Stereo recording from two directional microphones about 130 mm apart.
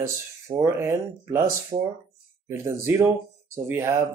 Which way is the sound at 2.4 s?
20° right (ahead or behind).